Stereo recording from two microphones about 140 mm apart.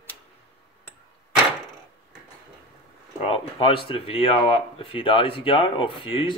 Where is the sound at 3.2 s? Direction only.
40° left (ahead or behind).